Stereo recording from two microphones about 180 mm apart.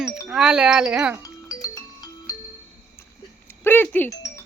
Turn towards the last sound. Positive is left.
turn(degrees=10)  # may be behind; listen again after turning